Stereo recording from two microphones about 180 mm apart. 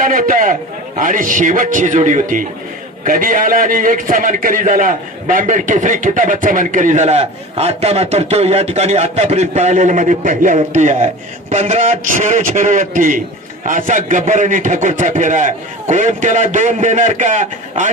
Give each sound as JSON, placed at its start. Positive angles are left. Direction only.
{"t": 0.0, "sound": "a man's voice", "side_deg": -50}